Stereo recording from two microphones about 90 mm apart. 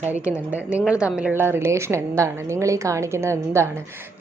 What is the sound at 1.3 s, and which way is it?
A woman's voice, 25° right (ahead or behind).